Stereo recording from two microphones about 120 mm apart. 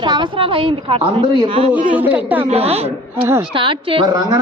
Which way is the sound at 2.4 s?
60° right (ahead or behind).